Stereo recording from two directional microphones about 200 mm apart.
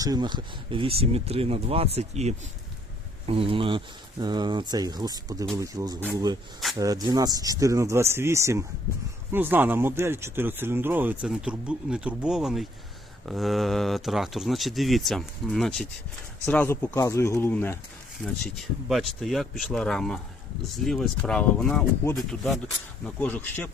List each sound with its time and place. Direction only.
0.0 s speech: 20° right (ahead or behind); by 17.7 s 10° left (ahead or behind)
18.5 s speech: centre (ahead or behind)